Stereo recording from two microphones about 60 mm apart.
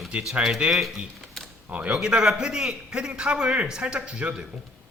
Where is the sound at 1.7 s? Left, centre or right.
Right.